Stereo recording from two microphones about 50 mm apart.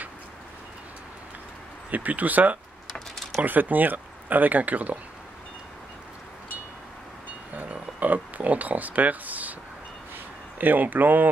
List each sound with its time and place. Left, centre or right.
1.9 s speech: right
7.5 s a sound: right
10.6 s speech: right